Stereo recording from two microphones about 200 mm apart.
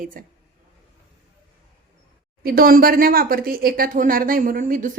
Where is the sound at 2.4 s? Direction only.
50° right (ahead or behind).